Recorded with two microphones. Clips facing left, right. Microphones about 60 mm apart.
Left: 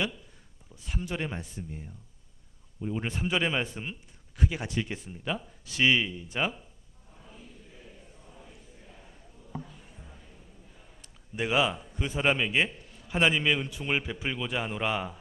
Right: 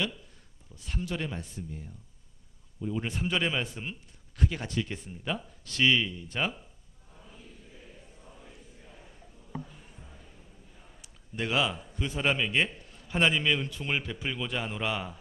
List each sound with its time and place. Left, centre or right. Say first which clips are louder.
0.7 s a man's voice: even; centre
1.0 s a man's voice: left 1 dB; left
11.3 s a man's voice: left 2 dB; centre